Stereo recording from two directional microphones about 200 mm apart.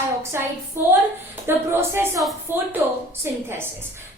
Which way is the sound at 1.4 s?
10° right (ahead or behind).